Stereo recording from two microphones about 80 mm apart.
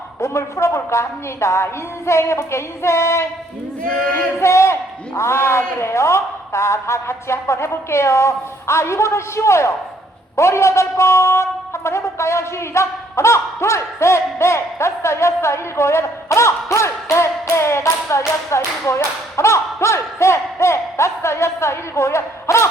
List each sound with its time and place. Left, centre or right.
0.2 s a man's voice: left